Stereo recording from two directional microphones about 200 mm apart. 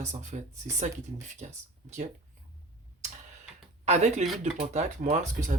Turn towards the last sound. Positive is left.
turn(degrees=-35)  # may be behind; listen again after turning